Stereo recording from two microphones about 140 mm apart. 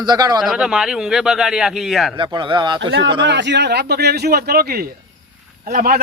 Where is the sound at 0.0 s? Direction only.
30° right (ahead or behind).